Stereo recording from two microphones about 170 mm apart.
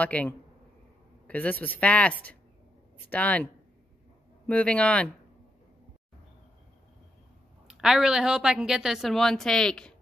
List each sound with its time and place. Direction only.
0.0 s a man's voice: 10° left (ahead or behind)
4.5 s a man's voice: 5° left (ahead or behind)
7.6 s a woman's voice: 5° right (ahead or behind)